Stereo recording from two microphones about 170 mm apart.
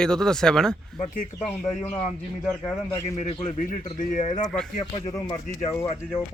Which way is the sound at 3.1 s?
40° left (ahead or behind).